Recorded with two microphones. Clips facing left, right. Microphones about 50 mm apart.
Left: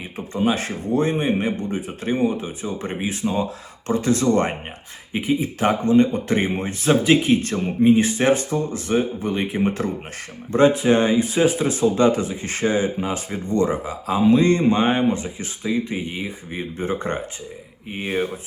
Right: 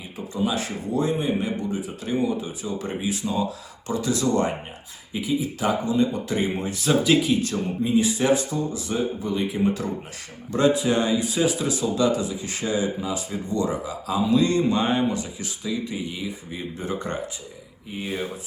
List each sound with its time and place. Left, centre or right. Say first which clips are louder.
0.3 s speech: left 4 dB; left